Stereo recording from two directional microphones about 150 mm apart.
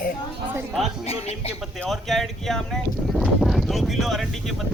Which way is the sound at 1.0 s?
45° left (ahead or behind).